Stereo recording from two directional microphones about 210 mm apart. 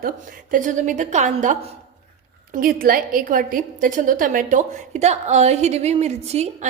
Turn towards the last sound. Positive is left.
turn(degrees=-30)  # may be behind; listen again after turning